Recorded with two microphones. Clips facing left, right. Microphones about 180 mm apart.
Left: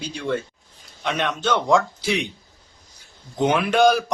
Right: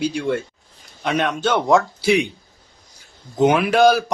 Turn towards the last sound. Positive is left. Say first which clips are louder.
# right 2 dB
turn(degrees=0)  # may be behind; listen again after turning